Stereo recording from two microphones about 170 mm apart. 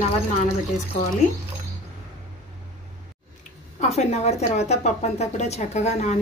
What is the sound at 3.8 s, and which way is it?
A woman's voice, 40° left (ahead or behind).